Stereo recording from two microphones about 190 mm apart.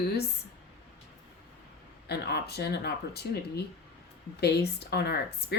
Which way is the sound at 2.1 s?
60° left (ahead or behind).